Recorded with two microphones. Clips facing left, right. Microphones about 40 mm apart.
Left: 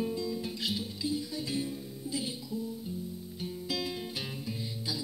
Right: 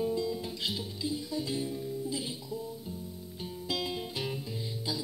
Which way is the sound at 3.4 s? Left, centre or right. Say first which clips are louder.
Right 1 dB; right.